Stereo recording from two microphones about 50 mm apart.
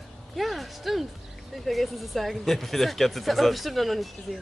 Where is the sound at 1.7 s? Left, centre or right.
Centre.